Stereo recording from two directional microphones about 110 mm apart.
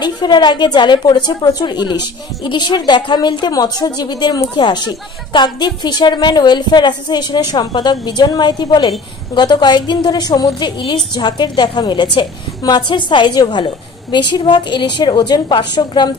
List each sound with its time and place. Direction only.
0.0 s a woman's voice: 40° left (ahead or behind)